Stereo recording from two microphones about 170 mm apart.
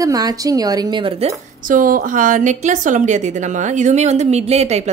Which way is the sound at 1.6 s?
55° right (ahead or behind).